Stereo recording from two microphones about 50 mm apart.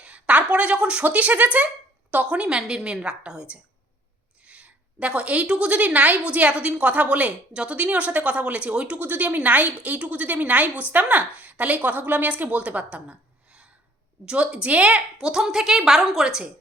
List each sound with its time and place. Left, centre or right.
0.0 s a sound: right
1.0 s speech: right
2.3 s a woman's voice: right
9.0 s a woman's voice: right; by 16.4 s centre